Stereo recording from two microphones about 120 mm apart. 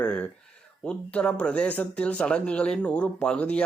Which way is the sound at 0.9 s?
10° left (ahead or behind).